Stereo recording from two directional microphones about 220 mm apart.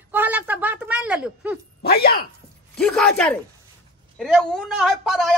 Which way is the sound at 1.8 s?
45° left (ahead or behind).